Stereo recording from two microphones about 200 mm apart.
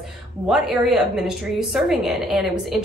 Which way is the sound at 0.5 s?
Centre (ahead or behind).